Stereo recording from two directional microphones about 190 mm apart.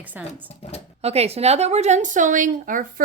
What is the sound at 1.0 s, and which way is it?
A woman's voice, 35° right (ahead or behind).